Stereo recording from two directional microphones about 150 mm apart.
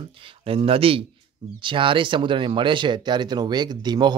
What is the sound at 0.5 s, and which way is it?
Speech, 40° right (ahead or behind).